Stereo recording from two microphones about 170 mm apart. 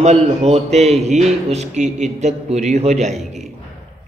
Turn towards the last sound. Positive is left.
turn(degrees=-40)  # may be behind; listen again after turning